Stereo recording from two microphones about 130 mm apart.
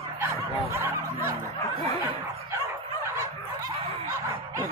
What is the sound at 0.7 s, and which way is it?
Music, 20° right (ahead or behind).